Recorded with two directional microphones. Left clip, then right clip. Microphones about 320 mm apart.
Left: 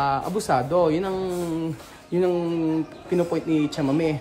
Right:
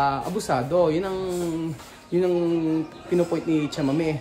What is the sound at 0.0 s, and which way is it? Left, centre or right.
Speech, centre.